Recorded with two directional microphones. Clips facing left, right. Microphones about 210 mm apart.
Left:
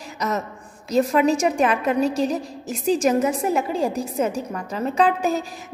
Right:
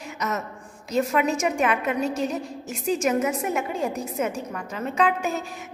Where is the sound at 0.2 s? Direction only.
35° left (ahead or behind).